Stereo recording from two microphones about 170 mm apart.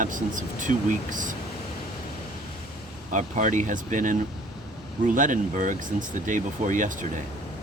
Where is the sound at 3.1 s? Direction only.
45° right (ahead or behind).